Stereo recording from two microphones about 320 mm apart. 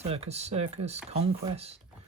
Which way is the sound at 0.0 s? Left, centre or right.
Centre.